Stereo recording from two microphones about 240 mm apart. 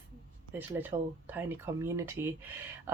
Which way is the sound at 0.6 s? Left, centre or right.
Centre.